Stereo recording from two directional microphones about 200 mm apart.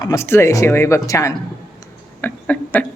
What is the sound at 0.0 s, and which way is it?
Speech, 15° left (ahead or behind).